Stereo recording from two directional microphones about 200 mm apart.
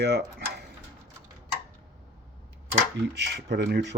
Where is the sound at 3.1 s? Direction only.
55° right (ahead or behind).